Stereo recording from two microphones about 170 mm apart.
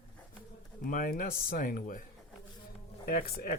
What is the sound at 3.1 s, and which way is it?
Speech, 65° left (ahead or behind).